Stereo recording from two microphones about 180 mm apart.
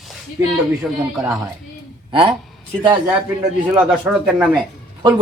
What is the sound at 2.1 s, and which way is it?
Speech, 30° right (ahead or behind).